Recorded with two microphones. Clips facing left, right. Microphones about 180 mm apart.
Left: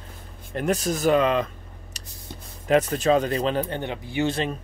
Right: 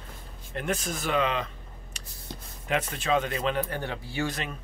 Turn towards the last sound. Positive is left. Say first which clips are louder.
# left 7 dB
turn(degrees=30)  # may be behind; listen again after turning